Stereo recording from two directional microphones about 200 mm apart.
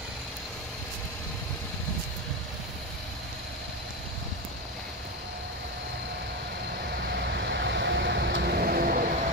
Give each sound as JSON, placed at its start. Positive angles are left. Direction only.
{"t": 7.1, "sound": "vehicle", "side_deg": -55}